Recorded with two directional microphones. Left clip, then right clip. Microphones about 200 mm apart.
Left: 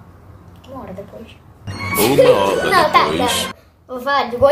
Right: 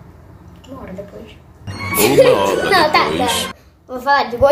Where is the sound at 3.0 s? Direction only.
Centre (ahead or behind).